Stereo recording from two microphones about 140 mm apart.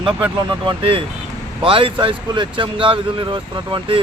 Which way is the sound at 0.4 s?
35° right (ahead or behind).